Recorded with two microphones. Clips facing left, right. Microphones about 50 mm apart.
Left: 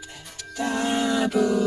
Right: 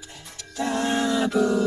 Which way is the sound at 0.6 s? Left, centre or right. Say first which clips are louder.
Even; centre.